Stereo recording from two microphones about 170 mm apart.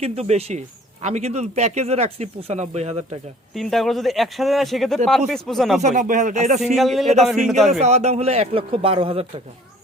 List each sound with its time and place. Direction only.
0.0 s speech: 40° right (ahead or behind)
3.5 s speech: centre (ahead or behind)
5.8 s speech: 45° right (ahead or behind)
6.7 s speech: centre (ahead or behind)
7.7 s speech: 40° right (ahead or behind)